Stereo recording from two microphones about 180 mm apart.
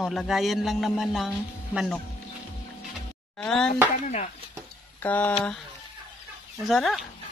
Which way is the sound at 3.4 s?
5° left (ahead or behind).